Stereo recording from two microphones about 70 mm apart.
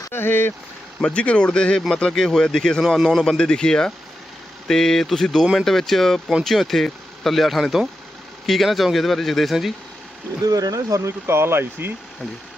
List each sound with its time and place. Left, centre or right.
0.1 s vehicle: left
1.0 s speech: centre
2.8 s speech: centre
3.2 s speech: centre
10.4 s speech: right